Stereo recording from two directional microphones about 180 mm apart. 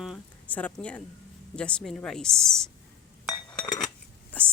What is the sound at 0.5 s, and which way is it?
A woman's voice, 5° left (ahead or behind).